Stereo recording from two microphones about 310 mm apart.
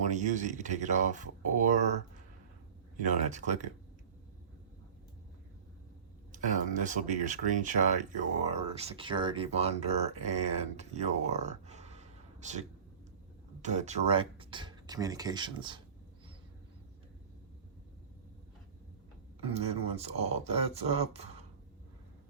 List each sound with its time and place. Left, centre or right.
0.1 s speech: right
3.0 s speech: right
6.3 s speech: right
19.4 s speech: centre